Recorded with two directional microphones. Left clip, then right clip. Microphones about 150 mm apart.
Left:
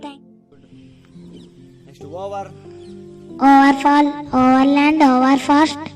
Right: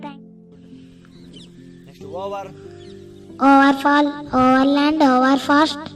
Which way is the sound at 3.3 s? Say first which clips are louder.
Left 2 dB; 75° left (ahead or behind).